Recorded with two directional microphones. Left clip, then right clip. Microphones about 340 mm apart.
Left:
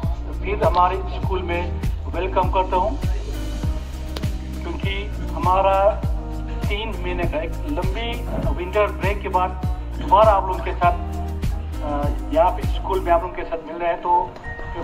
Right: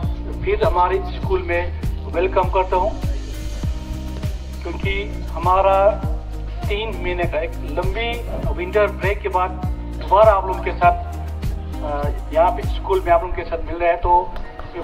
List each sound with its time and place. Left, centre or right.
0.5 s speech: centre
4.8 s speech: centre
12.0 s speech: centre